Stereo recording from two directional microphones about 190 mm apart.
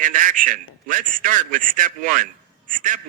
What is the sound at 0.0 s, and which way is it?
A man's voice, 45° right (ahead or behind).